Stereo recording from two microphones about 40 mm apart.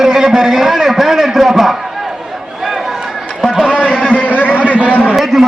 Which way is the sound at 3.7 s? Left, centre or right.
Right.